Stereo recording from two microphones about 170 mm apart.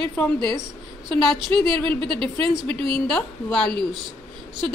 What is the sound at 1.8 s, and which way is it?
A woman's voice, 30° right (ahead or behind).